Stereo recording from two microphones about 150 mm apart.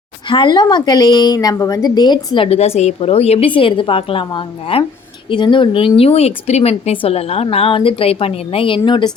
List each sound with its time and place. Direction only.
0.3 s a woman's voice: 30° left (ahead or behind)